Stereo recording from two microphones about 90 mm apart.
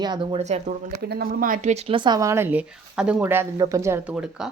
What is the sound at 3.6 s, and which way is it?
Speech, 35° right (ahead or behind).